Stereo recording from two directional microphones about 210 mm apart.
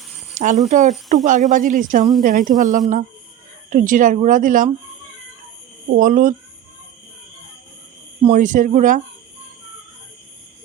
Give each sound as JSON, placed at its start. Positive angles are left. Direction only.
{"t": 0.3, "sound": "speech", "side_deg": -35}
{"t": 5.9, "sound": "speech", "side_deg": -40}
{"t": 8.2, "sound": "speech", "side_deg": -35}